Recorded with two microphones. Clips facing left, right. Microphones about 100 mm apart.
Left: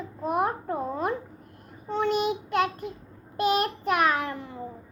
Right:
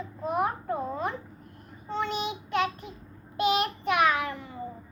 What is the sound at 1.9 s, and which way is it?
Child singing, 55° left (ahead or behind).